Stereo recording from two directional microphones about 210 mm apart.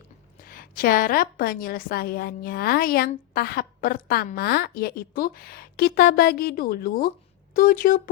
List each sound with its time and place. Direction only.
0.4 s a woman's voice: 45° left (ahead or behind)